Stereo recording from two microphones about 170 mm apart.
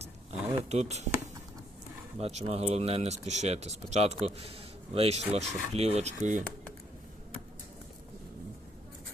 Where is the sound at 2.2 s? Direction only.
40° right (ahead or behind).